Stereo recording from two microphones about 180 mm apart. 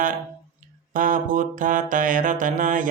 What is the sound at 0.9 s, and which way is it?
Speech, 50° right (ahead or behind).